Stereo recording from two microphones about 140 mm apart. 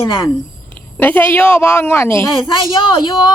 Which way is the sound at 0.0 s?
30° left (ahead or behind).